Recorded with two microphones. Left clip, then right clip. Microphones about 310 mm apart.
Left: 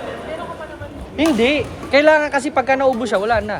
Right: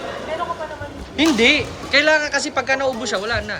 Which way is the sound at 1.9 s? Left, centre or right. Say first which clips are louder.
Left 3 dB; centre.